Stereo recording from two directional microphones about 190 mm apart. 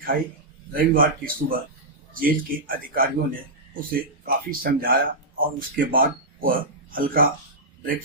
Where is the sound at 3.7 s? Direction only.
50° right (ahead or behind).